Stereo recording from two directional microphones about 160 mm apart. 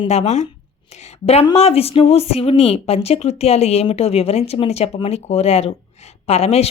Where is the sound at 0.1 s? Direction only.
45° left (ahead or behind).